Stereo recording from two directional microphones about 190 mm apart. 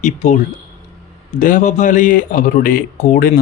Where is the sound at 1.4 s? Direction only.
40° left (ahead or behind).